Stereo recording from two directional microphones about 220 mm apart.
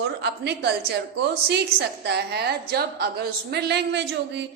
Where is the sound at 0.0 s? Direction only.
50° right (ahead or behind).